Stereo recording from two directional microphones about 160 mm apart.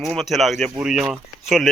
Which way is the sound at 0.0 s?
Centre (ahead or behind).